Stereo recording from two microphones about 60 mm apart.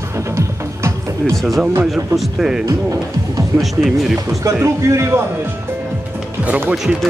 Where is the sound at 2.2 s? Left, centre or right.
Centre.